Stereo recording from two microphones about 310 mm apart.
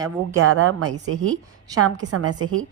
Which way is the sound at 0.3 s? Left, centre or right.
Right.